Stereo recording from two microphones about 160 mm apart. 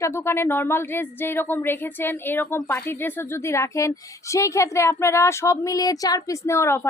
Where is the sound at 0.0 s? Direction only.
15° left (ahead or behind).